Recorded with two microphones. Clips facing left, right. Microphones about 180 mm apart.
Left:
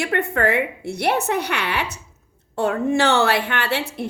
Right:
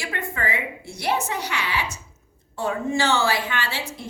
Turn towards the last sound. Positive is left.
turn(degrees=60)  # may be behind; listen again after turning